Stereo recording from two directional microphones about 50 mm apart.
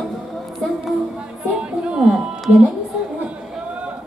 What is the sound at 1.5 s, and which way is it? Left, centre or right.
Music, centre.